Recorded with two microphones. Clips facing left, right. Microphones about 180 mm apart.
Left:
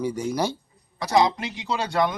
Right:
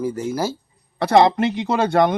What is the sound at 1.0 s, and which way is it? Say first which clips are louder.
Speech: right 6 dB; 60° right (ahead or behind).